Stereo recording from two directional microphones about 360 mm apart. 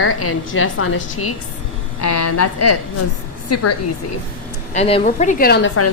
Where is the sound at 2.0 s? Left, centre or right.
Left.